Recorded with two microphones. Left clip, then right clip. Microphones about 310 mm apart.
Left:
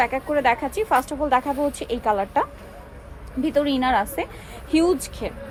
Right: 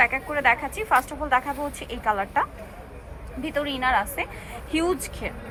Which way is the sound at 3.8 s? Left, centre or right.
Centre.